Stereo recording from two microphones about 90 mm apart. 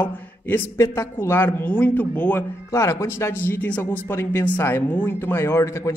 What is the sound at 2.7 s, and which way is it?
A man's voice, 35° left (ahead or behind).